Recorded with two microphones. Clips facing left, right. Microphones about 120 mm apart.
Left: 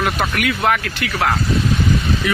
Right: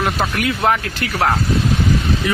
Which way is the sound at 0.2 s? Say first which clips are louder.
Even; 30° right (ahead or behind).